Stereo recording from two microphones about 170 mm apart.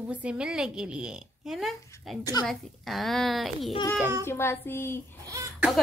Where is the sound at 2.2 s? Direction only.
20° left (ahead or behind).